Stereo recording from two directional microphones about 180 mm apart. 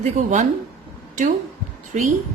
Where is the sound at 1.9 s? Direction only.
45° right (ahead or behind).